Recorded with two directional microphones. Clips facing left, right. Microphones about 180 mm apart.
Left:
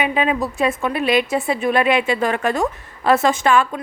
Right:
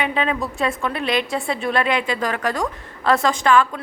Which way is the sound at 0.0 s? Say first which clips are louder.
Left 3 dB; 15° left (ahead or behind).